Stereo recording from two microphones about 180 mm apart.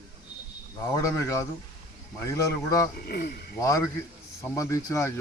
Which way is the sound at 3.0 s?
60° left (ahead or behind).